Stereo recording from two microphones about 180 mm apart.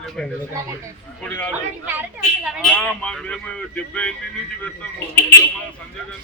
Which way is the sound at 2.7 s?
5° left (ahead or behind).